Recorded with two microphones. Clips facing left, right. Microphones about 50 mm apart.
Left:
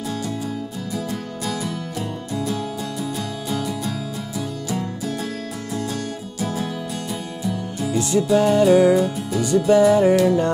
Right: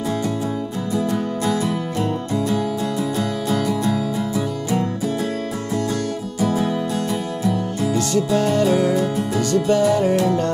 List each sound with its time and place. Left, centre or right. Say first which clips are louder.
0.9 s music: right 7 dB; right
7.9 s music: left 2 dB; centre